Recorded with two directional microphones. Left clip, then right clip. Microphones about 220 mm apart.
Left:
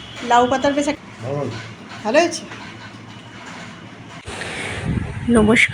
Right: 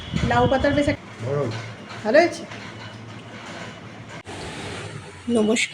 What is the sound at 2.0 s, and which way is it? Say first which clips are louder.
Speech: left 1 dB; centre (ahead or behind).